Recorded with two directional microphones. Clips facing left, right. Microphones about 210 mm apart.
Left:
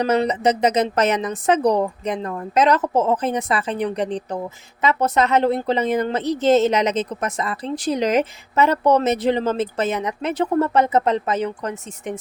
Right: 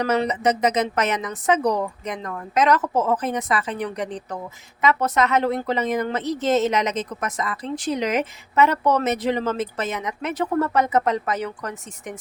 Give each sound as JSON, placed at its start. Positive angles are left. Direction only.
{"t": 0.0, "sound": "a woman's voice", "side_deg": 30}